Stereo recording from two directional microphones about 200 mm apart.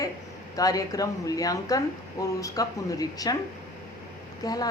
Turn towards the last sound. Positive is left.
turn(degrees=20)  # may be behind; listen again after turning